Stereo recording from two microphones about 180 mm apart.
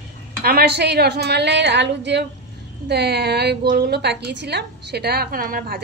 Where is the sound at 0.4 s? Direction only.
60° right (ahead or behind).